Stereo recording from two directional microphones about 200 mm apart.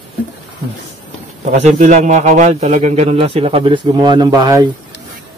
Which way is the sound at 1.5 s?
40° right (ahead or behind).